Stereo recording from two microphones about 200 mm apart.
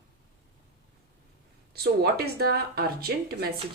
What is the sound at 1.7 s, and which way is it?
A woman's voice, 50° right (ahead or behind).